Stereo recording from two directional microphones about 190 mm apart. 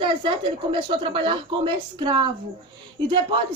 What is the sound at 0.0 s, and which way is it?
Speech, 25° right (ahead or behind).